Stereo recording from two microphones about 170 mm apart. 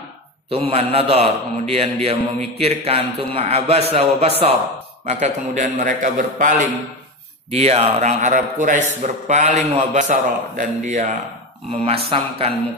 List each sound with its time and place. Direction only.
0.5 s a man's voice: 35° right (ahead or behind)
7.5 s a man's voice: 40° right (ahead or behind)
11.8 s a man's voice: 35° right (ahead or behind)